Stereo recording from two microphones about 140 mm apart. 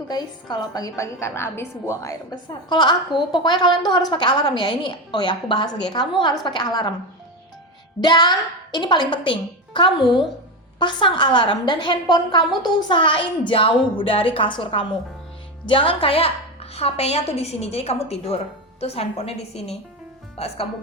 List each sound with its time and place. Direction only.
0.1 s a woman's voice: 30° left (ahead or behind)
8.0 s a woman's voice: 30° left (ahead or behind)